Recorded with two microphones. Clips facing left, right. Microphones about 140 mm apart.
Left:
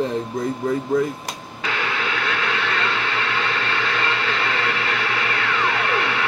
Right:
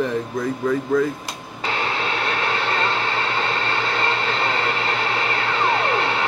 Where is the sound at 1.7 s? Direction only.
35° right (ahead or behind).